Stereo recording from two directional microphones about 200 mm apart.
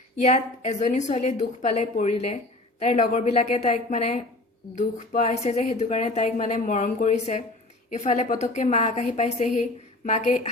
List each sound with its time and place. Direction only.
0.2 s a woman's voice: 35° left (ahead or behind)